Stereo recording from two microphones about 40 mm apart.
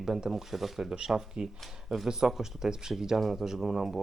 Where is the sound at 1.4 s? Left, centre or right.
Right.